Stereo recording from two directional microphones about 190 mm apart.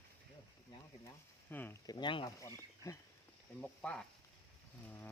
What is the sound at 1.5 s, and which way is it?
Speech, 10° left (ahead or behind).